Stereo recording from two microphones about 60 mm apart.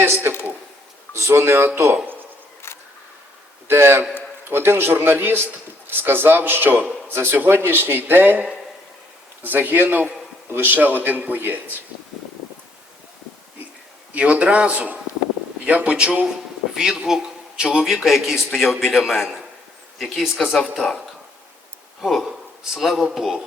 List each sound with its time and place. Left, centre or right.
0.0 s speech: right
1.1 s speech: right
2.6 s a sound: left
3.7 s speech: right
14.1 s a man's voice: right; by 19.4 s centre
20.4 s a man's voice: centre
22.0 s a man's voice: centre